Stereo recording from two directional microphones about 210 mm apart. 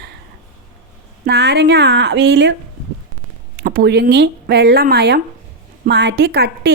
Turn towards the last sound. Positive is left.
turn(degrees=-50)  # may be behind; listen again after turning